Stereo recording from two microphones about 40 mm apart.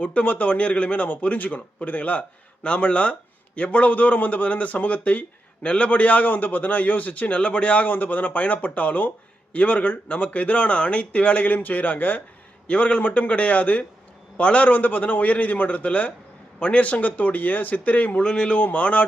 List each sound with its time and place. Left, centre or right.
0.0 s a man's voice: left
11.4 s speech: left
12.6 s a man's voice: left
18.2 s speech: left
18.6 s a man's voice: left